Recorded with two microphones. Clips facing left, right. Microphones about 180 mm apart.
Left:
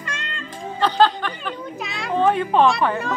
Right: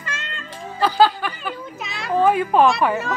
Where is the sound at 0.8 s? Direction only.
10° right (ahead or behind).